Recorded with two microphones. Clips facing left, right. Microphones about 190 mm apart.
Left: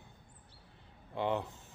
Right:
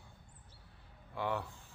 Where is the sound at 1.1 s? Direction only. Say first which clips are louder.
Left 4 dB; 20° left (ahead or behind).